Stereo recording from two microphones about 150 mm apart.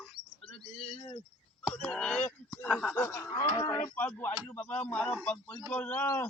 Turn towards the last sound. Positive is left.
turn(degrees=15)  # may be behind; listen again after turning